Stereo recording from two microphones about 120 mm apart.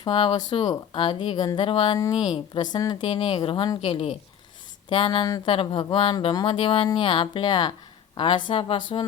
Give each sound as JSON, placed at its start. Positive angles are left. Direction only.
{"t": 0.0, "sound": "a woman's voice", "side_deg": 40}
{"t": 3.8, "sound": "a woman's voice", "side_deg": 50}